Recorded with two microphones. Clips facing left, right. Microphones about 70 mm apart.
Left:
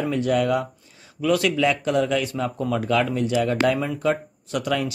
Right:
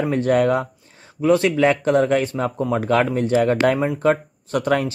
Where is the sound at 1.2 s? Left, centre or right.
Right.